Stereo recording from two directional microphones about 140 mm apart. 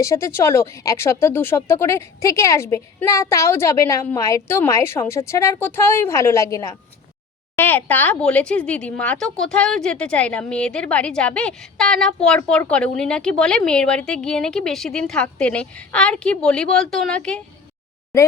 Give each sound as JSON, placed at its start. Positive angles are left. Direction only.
{"t": 0.0, "sound": "a woman's voice", "side_deg": 20}